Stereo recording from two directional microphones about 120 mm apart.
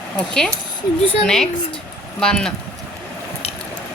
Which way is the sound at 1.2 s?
5° left (ahead or behind).